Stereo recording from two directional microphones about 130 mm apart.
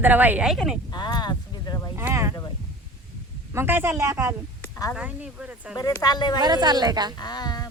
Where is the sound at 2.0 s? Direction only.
20° right (ahead or behind).